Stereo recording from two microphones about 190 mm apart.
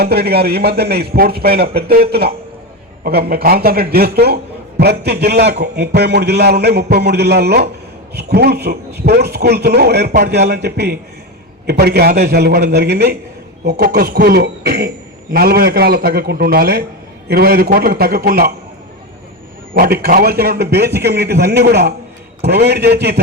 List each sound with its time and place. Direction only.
0.0 s a man's voice: 55° right (ahead or behind)
19.7 s a man's voice: 55° right (ahead or behind)